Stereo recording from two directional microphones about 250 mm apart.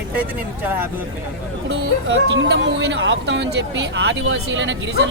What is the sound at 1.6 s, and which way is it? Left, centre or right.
Speech, right.